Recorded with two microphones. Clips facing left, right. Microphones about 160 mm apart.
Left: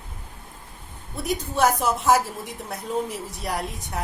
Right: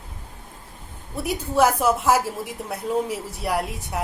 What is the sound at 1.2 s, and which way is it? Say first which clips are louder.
A woman's voice: right 2 dB; 5° right (ahead or behind).